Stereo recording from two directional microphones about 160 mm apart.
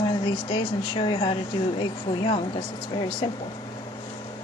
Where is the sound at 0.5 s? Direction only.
30° left (ahead or behind).